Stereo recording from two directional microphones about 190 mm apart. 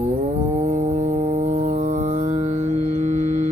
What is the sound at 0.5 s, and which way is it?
Music, 40° right (ahead or behind).